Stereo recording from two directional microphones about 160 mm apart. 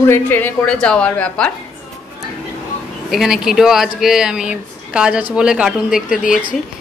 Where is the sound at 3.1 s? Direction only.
Centre (ahead or behind).